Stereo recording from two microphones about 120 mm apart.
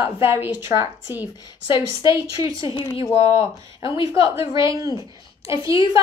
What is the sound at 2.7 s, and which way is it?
Speech, 40° left (ahead or behind).